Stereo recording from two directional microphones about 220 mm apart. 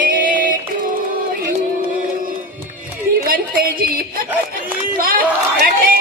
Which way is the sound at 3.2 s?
40° right (ahead or behind).